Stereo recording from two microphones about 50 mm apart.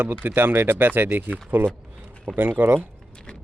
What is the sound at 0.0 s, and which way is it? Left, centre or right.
Speech, right.